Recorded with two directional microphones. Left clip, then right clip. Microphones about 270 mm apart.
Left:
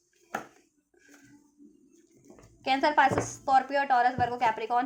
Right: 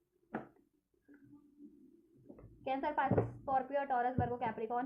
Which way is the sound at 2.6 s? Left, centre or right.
Left.